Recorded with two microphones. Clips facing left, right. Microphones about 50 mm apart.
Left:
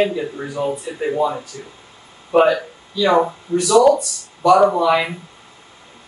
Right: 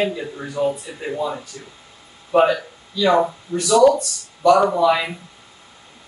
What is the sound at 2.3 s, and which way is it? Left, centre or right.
Speech, centre.